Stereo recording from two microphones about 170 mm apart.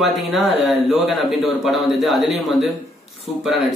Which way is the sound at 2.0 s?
Centre (ahead or behind).